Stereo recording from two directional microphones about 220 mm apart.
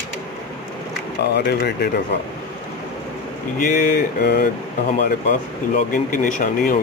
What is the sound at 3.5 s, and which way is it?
Speech, 40° left (ahead or behind).